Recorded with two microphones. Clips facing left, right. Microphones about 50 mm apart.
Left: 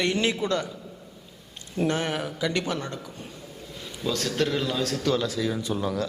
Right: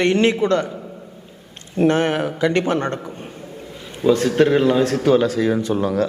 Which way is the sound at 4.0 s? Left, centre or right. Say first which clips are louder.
Right 11 dB; right.